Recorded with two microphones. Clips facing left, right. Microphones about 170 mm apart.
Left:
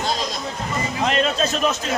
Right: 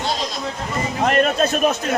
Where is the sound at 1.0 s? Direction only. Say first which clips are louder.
Right 4 dB; 55° right (ahead or behind).